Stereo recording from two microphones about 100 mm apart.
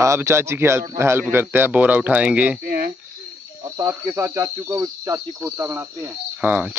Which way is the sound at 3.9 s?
25° right (ahead or behind).